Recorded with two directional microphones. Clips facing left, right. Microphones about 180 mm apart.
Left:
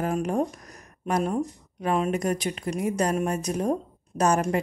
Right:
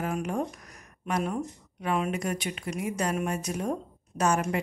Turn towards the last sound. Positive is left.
turn(degrees=40)  # may be behind; listen again after turning